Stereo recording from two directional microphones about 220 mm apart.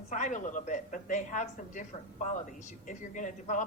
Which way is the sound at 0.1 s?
35° left (ahead or behind).